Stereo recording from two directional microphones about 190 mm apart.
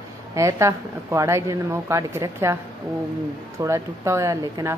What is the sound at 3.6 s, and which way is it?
A woman's voice, 15° right (ahead or behind).